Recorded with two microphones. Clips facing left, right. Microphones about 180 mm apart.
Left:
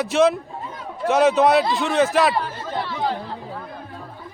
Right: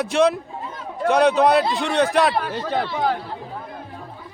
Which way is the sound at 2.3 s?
90° right.